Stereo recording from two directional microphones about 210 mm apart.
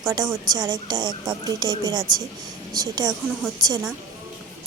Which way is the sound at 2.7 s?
20° right (ahead or behind).